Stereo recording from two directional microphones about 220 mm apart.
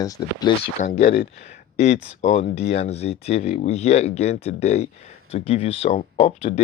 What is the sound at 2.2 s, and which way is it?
Speech, 25° left (ahead or behind).